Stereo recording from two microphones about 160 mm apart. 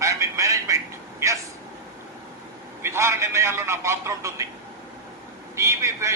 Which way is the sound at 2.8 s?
15° right (ahead or behind).